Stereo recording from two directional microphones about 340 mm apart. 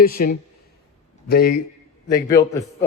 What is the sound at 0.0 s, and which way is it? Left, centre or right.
Speech, left.